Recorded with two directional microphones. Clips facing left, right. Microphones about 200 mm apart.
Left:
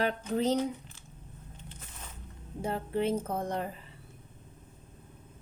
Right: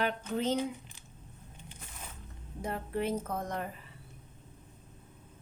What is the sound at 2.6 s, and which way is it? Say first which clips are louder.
Speech: left 3 dB; 30° left (ahead or behind).